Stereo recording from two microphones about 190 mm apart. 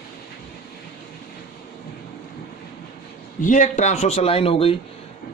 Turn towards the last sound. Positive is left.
turn(degrees=30)  # may be behind; listen again after turning